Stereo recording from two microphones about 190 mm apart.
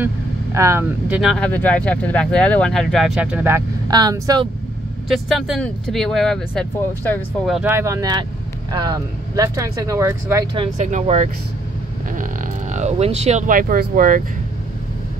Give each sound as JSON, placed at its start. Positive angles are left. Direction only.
{"t": 0.6, "sound": "speech", "side_deg": -15}
{"t": 5.0, "sound": "speech", "side_deg": 0}
{"t": 7.7, "sound": "speech", "side_deg": -15}
{"t": 10.5, "sound": "speech", "side_deg": -35}
{"t": 12.7, "sound": "speech", "side_deg": -35}